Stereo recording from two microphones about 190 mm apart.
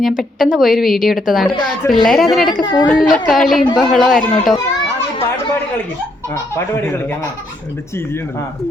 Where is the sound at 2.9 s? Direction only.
5° left (ahead or behind).